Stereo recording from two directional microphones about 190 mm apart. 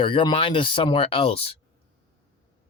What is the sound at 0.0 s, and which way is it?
Speech, 25° left (ahead or behind).